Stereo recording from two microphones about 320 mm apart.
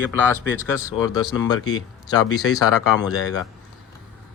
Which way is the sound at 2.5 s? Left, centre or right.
Left.